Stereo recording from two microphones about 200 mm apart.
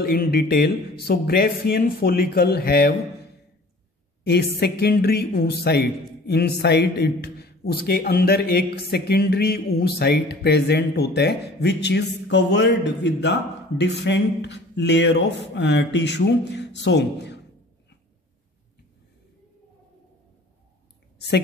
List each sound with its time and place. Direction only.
0.0 s speech: 50° left (ahead or behind)
4.2 s speech: 55° left (ahead or behind)